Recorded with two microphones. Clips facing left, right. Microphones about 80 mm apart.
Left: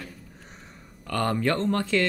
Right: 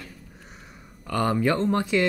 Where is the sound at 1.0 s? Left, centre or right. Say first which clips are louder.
Right 2 dB; centre.